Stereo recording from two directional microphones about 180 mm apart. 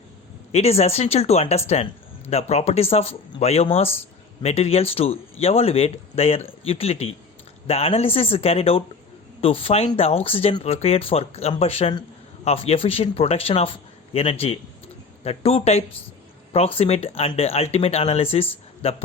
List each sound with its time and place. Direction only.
0.5 s speech: 35° left (ahead or behind)